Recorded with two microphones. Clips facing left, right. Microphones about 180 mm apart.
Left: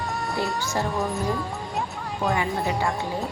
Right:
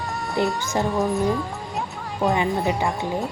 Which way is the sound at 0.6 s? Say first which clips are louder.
Right 3 dB; 20° right (ahead or behind).